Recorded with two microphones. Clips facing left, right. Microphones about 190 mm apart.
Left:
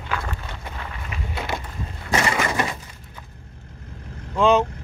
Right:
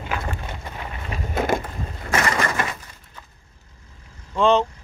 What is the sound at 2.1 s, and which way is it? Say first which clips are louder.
Crushing: even; 10° left (ahead or behind).